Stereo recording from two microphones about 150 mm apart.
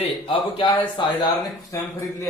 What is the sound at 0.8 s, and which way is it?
Speech, 25° left (ahead or behind).